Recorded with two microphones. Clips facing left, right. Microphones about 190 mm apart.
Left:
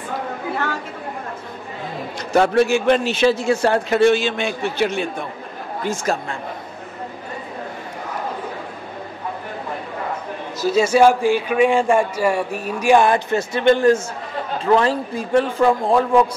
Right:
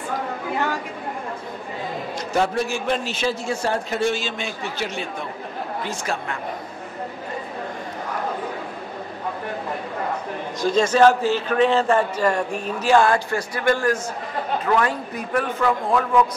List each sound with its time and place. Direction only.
2.3 s a man's voice: 65° left (ahead or behind)
6.1 s a man's voice: 40° left (ahead or behind)
10.6 s a man's voice: 10° left (ahead or behind); by 16.3 s 30° left (ahead or behind)